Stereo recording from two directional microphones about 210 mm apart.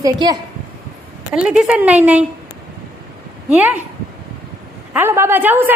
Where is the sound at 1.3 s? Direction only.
5° right (ahead or behind).